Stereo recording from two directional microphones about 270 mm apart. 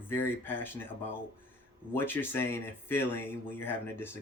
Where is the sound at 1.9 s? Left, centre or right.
Centre.